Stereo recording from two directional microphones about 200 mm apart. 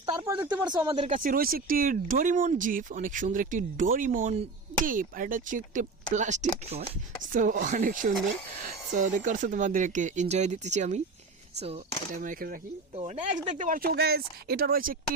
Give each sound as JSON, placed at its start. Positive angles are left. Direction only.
{"t": 0.2, "sound": "speech", "side_deg": -15}
{"t": 1.2, "sound": "speech", "side_deg": -45}
{"t": 12.1, "sound": "speech", "side_deg": -40}
{"t": 13.0, "sound": "speech", "side_deg": -30}